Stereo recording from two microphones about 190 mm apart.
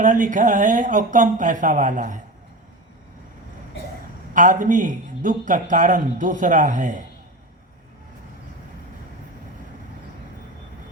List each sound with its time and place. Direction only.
0.0 s a man's voice: 40° right (ahead or behind)
4.4 s a man's voice: 45° right (ahead or behind)